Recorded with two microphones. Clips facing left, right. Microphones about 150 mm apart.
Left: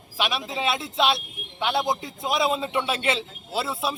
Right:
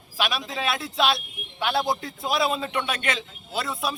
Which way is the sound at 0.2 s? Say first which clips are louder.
Left 1 dB; 25° left (ahead or behind).